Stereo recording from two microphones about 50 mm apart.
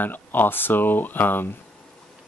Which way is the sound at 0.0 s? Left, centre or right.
Left.